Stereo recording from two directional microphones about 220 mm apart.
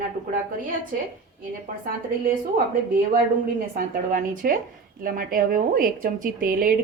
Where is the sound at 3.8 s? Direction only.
40° right (ahead or behind).